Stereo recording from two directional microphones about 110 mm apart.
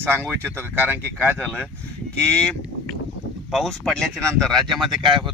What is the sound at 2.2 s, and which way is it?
Speech, 10° left (ahead or behind).